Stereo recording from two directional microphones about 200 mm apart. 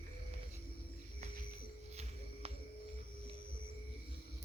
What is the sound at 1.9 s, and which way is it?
Music, 35° right (ahead or behind).